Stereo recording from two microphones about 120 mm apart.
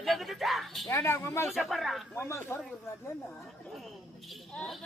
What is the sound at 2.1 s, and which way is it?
Speech, 20° left (ahead or behind).